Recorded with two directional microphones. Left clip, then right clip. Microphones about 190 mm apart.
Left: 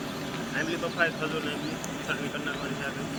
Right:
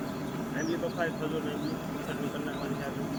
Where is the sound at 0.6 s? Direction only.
20° right (ahead or behind).